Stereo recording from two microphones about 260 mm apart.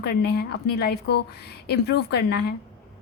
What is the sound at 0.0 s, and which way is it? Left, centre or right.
A woman's voice, left.